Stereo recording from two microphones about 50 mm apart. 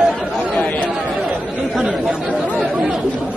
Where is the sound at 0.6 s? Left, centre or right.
Left.